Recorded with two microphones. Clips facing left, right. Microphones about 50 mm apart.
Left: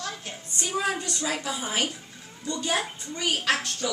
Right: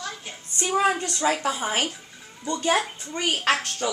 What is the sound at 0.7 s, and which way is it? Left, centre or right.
A woman's voice, right.